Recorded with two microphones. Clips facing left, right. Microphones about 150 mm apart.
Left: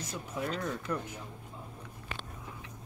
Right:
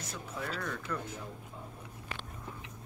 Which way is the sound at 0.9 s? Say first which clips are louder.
Left 3 dB; 30° left (ahead or behind).